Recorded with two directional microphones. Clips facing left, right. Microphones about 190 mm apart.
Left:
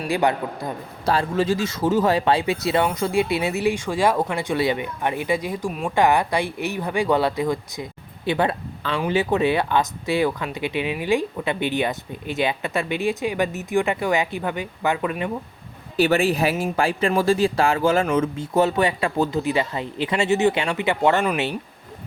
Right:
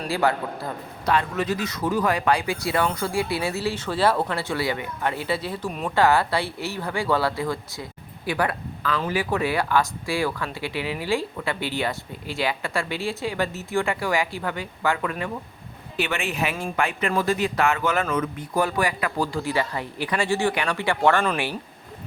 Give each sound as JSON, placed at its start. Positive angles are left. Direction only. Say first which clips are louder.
{"t": 0.1, "sound": "speech", "louder": "left 2 dB", "side_deg": 20}
{"t": 1.0, "sound": "speech", "louder": "left 3 dB", "side_deg": 30}
{"t": 16.0, "sound": "speech", "louder": "left 8 dB", "side_deg": 35}